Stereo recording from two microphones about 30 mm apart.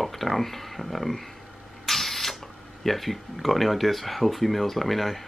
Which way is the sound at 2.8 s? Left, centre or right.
Centre.